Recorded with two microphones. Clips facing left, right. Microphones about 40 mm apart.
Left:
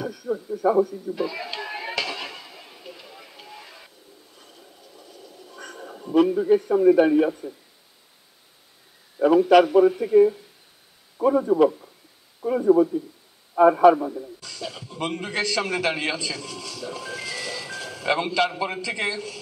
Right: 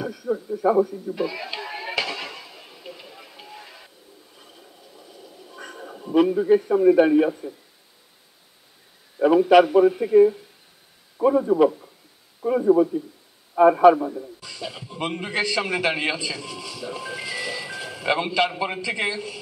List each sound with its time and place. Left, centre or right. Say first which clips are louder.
0.0 s a man's voice: right 2 dB; centre
2.0 s a sound: right 2 dB; centre
2.9 s vehicle: right 2 dB; centre
4.4 s a sound: right 1 dB; centre
9.2 s a man's voice: right 1 dB; centre
14.4 s a man's voice: even; centre